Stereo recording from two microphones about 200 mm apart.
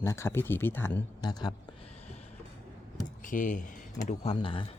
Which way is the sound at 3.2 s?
40° left (ahead or behind).